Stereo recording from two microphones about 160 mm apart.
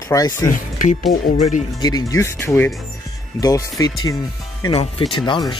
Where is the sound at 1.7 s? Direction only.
25° left (ahead or behind).